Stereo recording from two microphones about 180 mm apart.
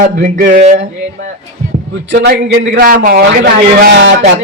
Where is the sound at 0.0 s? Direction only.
50° right (ahead or behind).